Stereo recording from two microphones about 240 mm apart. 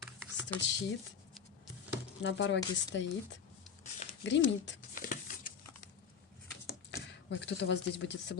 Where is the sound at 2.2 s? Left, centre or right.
Left.